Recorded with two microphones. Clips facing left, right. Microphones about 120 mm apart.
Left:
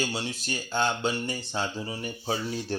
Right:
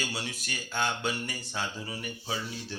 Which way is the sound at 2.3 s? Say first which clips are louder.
Left 8 dB; 45° left (ahead or behind).